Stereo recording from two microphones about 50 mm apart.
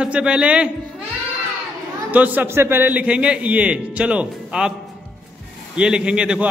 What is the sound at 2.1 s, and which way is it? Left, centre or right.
Speech, right.